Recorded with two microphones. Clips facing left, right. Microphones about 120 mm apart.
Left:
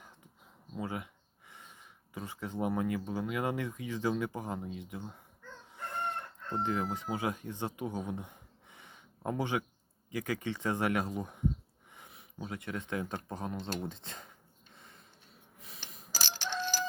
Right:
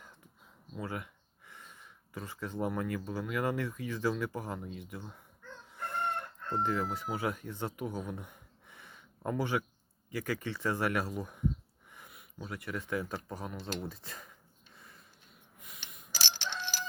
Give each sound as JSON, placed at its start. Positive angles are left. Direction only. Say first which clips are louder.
{"t": 0.8, "sound": "speech", "louder": "left 1 dB", "side_deg": 20}
{"t": 6.6, "sound": "speech", "louder": "right 1 dB", "side_deg": 20}
{"t": 15.5, "sound": "a sound", "louder": "left 1 dB", "side_deg": 30}